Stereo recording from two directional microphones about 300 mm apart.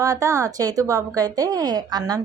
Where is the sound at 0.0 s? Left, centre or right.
Centre.